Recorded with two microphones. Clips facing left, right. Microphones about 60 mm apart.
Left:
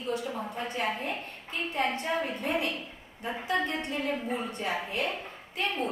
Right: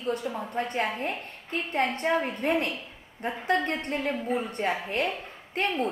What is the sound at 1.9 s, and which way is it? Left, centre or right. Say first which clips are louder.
Speech: right 4 dB; right.